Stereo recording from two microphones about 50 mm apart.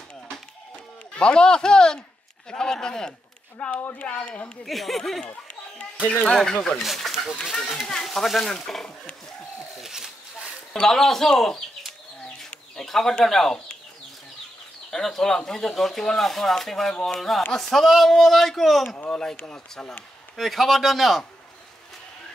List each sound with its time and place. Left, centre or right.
1.1 s speech: centre
4.6 s speech: centre
5.2 s chatter: left
6.2 s speech: centre
6.8 s speech: centre
9.8 s a sound: centre
10.7 s speech: centre
12.4 s chicken: centre
13.2 s speech: centre
14.9 s speech: centre
19.0 s speech: centre
20.3 s speech: centre